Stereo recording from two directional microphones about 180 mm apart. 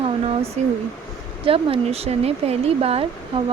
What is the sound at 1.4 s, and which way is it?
Speech, 30° right (ahead or behind).